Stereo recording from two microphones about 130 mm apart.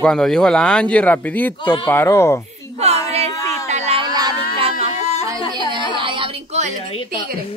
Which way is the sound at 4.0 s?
35° right (ahead or behind).